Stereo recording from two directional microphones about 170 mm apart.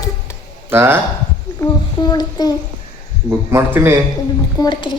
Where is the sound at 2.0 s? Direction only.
25° left (ahead or behind).